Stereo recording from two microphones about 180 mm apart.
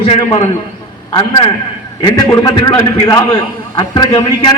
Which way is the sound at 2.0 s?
20° left (ahead or behind).